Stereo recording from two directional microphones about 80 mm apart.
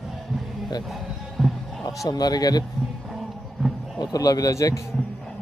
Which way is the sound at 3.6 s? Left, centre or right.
Centre.